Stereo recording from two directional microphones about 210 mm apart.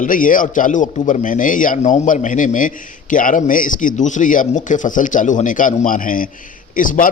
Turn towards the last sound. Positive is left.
turn(degrees=40)  # may be behind; listen again after turning